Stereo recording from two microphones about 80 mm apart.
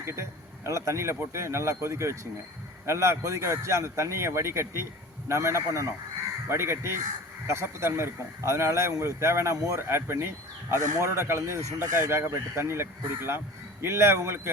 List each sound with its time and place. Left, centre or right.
0.0 s speech: right